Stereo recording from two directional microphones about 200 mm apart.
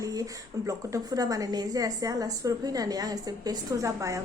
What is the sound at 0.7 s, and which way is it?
A woman's voice, 15° right (ahead or behind).